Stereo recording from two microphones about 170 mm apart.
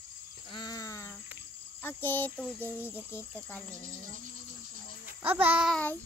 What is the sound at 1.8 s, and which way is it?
Speech, 10° left (ahead or behind).